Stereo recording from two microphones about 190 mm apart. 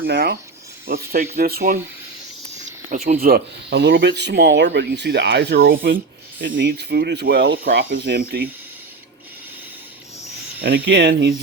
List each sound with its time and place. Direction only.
0.1 s speech: 50° right (ahead or behind)
2.9 s speech: 45° right (ahead or behind)
10.8 s speech: 65° right (ahead or behind)